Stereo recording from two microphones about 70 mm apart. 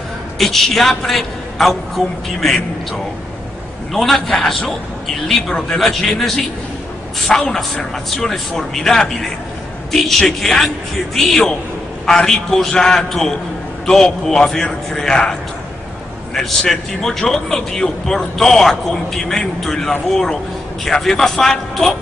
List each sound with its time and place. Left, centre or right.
0.4 s a man's voice: centre
3.9 s a man's voice: centre
16.3 s a man's voice: centre